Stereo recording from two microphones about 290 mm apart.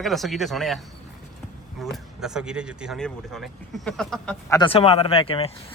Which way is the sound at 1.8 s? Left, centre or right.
Centre.